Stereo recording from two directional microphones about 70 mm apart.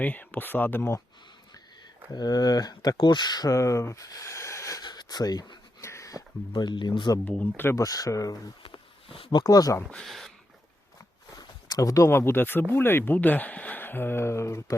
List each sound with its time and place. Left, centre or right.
0.0 s speech: left
2.1 s speech: left
3.0 s speech: left
3.5 s speech: left
4.8 s a sound: left
5.8 s speech: left
7.3 s speech: left
7.8 s speech: left
9.4 s speech: left
9.9 s speech: centre
11.3 s a sound: left
12.1 s speech: left